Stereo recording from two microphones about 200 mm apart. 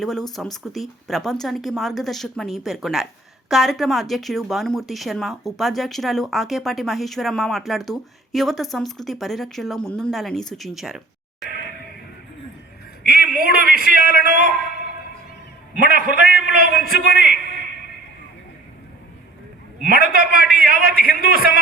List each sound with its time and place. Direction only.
0.0 s speech: centre (ahead or behind)
13.1 s a man's voice: 45° right (ahead or behind)
15.8 s a man's voice: 45° right (ahead or behind)
20.1 s a man's voice: 50° right (ahead or behind)